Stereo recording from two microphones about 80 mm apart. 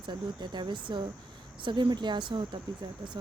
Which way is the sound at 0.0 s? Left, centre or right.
Right.